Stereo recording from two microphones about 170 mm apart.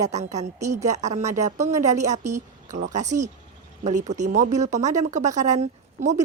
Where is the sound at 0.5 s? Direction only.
15° right (ahead or behind).